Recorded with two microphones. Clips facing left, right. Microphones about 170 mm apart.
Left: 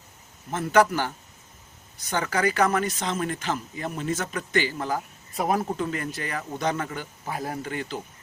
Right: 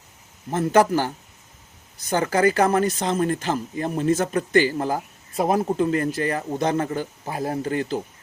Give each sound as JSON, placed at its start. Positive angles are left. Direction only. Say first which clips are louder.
{"t": 0.5, "sound": "speech", "louder": "right 3 dB", "side_deg": -35}
{"t": 5.4, "sound": "speech", "louder": "right 5 dB", "side_deg": -30}